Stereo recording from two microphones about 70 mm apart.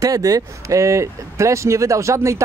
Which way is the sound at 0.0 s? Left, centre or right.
Right.